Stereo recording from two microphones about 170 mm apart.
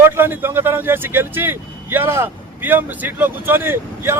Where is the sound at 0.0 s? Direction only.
15° right (ahead or behind).